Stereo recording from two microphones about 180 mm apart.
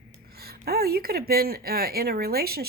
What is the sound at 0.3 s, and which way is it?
A woman's voice, 60° right (ahead or behind).